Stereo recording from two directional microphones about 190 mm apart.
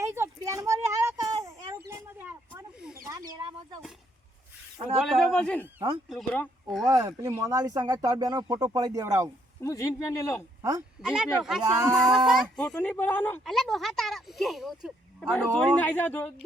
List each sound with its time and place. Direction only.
0.0 s a sound: 15° right (ahead or behind)
1.9 s snake: 15° right (ahead or behind)
5.0 s speech: 5° left (ahead or behind)
6.8 s speech: 20° right (ahead or behind)
9.6 s a man's voice: 15° left (ahead or behind)
10.6 s speech: 15° right (ahead or behind)
11.0 s speech: 5° right (ahead or behind)
11.6 s speech: 15° right (ahead or behind)
11.9 s a man's voice: centre (ahead or behind)